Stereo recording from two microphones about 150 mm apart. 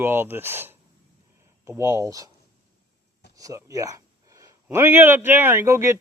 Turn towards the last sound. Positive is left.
turn(degrees=-20)  # may be behind; listen again after turning